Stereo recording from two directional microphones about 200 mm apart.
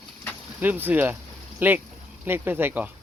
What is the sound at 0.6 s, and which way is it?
Speech, 10° right (ahead or behind).